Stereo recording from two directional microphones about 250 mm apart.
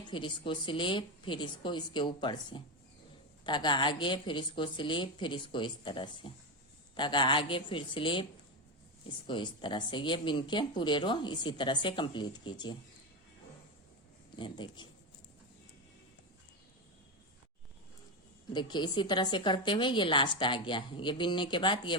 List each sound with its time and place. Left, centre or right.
0.0 s speech: centre
14.3 s speech: centre
18.5 s speech: centre